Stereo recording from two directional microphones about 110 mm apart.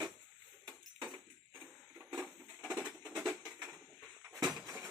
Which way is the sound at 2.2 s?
10° right (ahead or behind).